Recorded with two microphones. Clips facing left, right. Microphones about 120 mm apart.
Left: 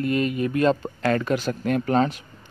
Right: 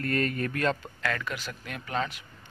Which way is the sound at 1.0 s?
35° left (ahead or behind).